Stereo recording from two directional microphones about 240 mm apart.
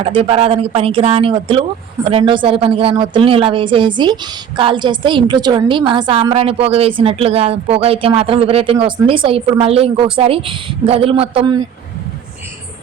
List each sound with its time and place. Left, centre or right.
0.0 s a woman's voice: right